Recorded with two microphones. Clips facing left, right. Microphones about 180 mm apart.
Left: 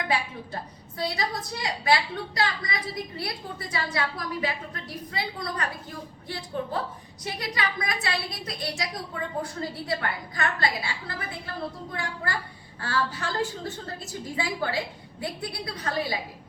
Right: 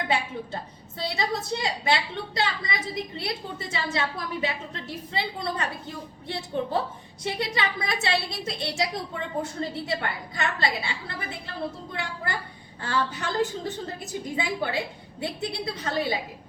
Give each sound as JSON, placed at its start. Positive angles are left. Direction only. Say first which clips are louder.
{"t": 0.1, "sound": "a woman's voice", "louder": "right 2 dB", "side_deg": -25}